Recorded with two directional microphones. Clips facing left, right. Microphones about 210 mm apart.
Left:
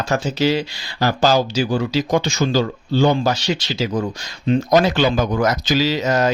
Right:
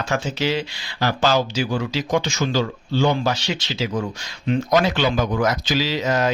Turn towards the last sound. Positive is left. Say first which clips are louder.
# left 3 dB
turn(degrees=40)  # may be behind; listen again after turning